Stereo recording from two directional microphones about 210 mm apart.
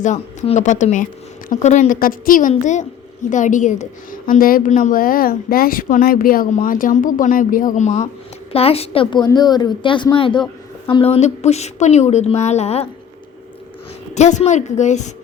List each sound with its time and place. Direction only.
0.0 s a woman's voice: 35° left (ahead or behind)
14.2 s a woman's voice: 35° left (ahead or behind)